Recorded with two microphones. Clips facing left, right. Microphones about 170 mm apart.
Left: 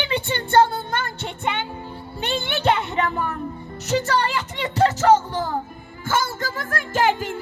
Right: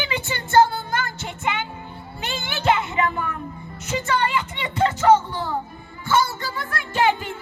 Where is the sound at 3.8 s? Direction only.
40° left (ahead or behind).